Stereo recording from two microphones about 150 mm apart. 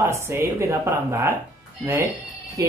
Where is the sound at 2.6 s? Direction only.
20° right (ahead or behind).